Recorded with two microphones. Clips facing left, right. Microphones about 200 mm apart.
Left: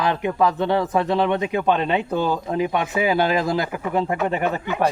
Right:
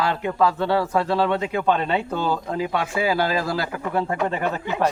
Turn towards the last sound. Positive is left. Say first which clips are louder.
# left 2 dB
turn(degrees=15)  # may be behind; listen again after turning